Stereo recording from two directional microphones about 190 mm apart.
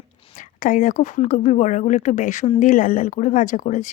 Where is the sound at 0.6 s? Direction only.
45° left (ahead or behind).